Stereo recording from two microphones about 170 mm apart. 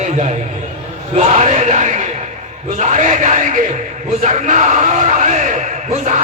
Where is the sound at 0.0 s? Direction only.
45° right (ahead or behind).